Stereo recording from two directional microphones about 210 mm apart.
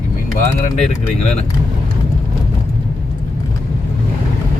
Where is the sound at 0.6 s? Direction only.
35° left (ahead or behind).